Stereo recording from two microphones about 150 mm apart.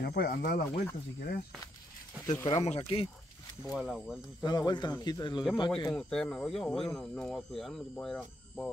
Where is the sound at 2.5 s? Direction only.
40° left (ahead or behind).